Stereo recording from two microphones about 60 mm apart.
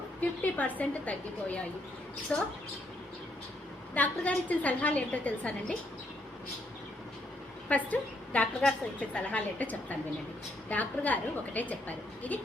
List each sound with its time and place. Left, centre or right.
0.2 s a woman's voice: left
3.9 s a woman's voice: left
7.7 s a woman's voice: left